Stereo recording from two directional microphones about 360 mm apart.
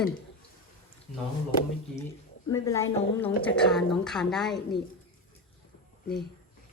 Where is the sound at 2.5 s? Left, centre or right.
Centre.